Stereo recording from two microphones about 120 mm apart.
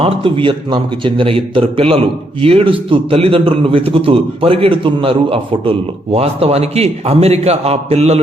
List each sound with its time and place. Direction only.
0.0 s a man's voice: 50° right (ahead or behind)